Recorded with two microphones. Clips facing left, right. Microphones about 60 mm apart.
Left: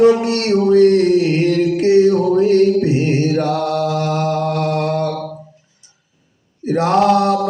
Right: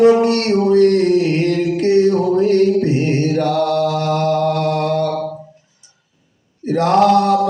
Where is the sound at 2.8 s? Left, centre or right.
Centre.